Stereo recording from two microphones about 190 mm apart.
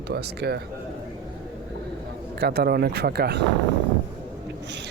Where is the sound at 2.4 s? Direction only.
60° right (ahead or behind).